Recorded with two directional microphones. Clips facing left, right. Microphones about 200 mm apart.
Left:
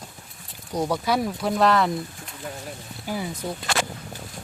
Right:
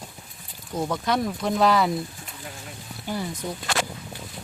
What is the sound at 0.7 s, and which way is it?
Speech, 15° left (ahead or behind).